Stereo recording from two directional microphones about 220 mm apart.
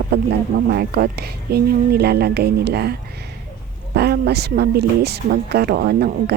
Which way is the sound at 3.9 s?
45° right (ahead or behind).